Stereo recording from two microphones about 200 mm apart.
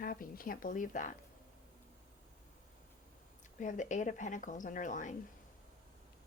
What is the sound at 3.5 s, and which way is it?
Speech, 40° left (ahead or behind).